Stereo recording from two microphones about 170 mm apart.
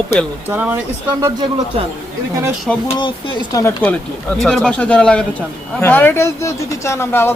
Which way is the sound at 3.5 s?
15° left (ahead or behind).